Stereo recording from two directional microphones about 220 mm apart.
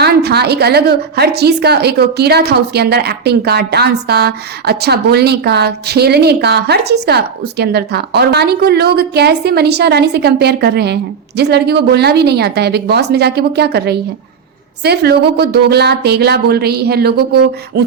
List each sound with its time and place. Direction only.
0.0 s a woman's voice: 50° right (ahead or behind)